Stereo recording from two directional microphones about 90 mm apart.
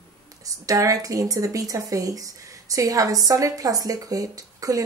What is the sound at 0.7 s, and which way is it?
A woman's voice, 40° right (ahead or behind).